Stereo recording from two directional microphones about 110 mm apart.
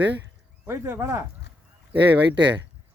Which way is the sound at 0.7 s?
25° right (ahead or behind).